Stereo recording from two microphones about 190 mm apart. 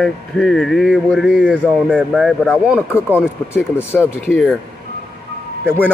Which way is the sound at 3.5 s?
10° left (ahead or behind).